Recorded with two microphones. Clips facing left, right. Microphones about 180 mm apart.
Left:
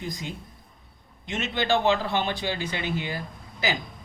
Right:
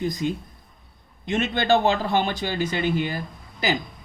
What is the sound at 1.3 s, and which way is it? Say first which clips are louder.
Speech: right 5 dB; 55° right (ahead or behind).